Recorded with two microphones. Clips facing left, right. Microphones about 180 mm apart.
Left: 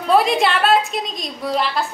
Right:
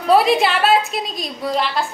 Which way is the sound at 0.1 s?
Centre (ahead or behind).